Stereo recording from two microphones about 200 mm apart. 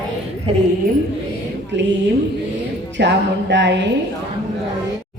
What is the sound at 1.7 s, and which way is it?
Music, 60° right (ahead or behind).